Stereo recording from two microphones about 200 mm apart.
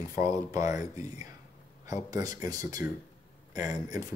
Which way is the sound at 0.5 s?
15° right (ahead or behind).